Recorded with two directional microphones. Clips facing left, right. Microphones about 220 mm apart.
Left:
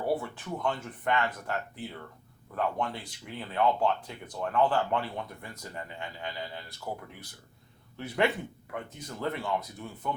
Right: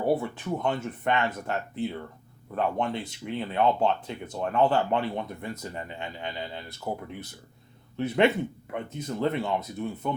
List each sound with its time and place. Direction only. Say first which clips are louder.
0.0 s speech: right 5 dB; 20° right (ahead or behind)